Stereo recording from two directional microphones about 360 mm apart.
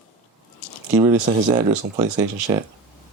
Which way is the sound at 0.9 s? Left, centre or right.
Centre.